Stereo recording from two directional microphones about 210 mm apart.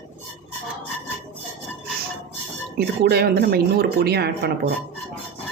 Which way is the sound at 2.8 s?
50° right (ahead or behind).